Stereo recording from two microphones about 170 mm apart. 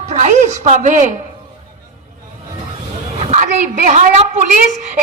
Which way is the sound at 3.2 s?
40° right (ahead or behind).